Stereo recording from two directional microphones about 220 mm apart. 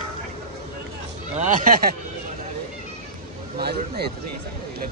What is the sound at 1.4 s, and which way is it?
Speech, 35° right (ahead or behind).